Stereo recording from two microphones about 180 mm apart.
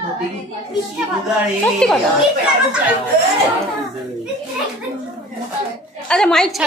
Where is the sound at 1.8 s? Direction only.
5° left (ahead or behind).